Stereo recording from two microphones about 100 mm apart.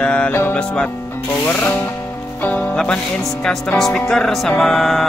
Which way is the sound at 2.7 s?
5° left (ahead or behind).